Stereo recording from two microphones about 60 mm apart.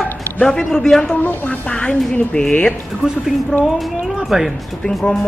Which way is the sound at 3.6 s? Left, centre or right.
Centre.